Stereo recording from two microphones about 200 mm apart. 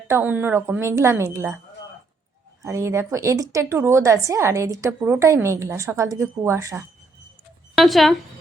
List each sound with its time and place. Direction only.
0.1 s a woman's voice: 10° right (ahead or behind)
2.6 s a woman's voice: 15° right (ahead or behind)
7.8 s speech: centre (ahead or behind)